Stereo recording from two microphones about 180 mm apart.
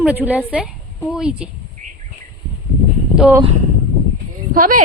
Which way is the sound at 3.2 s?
5° right (ahead or behind).